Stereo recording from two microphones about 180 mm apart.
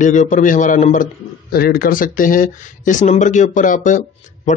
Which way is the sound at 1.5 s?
55° left (ahead or behind).